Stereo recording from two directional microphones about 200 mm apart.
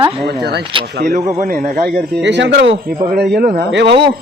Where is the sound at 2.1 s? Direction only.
60° right (ahead or behind).